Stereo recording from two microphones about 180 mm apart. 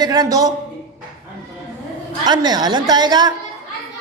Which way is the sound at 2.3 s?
20° right (ahead or behind).